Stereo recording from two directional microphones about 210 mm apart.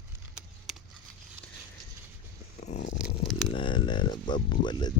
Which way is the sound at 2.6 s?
35° left (ahead or behind).